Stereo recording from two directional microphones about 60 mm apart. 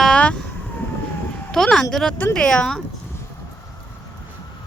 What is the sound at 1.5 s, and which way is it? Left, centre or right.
Speech, centre.